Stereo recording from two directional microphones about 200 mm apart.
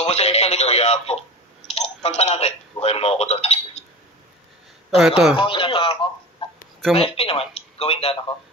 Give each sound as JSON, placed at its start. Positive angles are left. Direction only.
{"t": 0.0, "sound": "a man's voice", "side_deg": 30}
{"t": 4.9, "sound": "speech", "side_deg": 0}
{"t": 5.3, "sound": "speech", "side_deg": 25}